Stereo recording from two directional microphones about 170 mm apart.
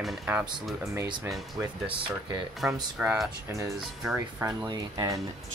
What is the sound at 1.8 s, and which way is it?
Speech, 30° right (ahead or behind).